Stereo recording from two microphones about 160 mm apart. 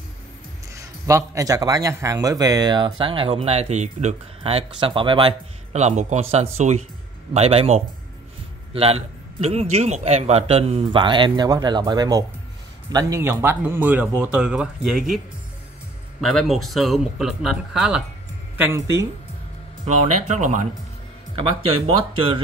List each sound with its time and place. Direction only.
0.7 s a man's voice: 20° right (ahead or behind); by 15.1 s 5° right (ahead or behind)
16.2 s speech: centre (ahead or behind)
18.6 s speech: 20° right (ahead or behind)
19.9 s a man's voice: 45° right (ahead or behind)
21.4 s a man's voice: 35° right (ahead or behind)